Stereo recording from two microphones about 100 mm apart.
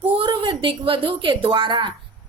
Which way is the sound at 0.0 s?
60° right (ahead or behind).